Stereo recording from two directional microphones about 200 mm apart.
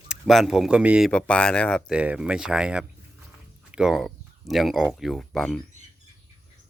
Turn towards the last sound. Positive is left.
turn(degrees=0)  # may be behind; listen again after turning